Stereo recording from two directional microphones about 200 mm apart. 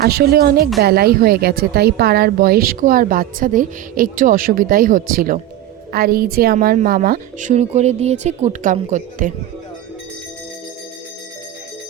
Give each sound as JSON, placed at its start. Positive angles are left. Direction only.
{"t": 0.0, "sound": "a woman's voice", "side_deg": -50}